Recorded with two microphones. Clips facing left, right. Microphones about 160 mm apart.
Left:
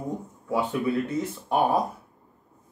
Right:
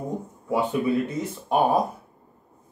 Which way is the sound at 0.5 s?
15° right (ahead or behind).